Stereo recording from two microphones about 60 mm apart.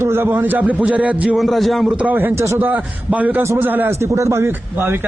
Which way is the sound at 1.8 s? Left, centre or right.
Right.